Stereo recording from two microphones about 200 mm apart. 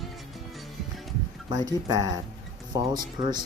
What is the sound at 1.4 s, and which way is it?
Speech, 20° right (ahead or behind).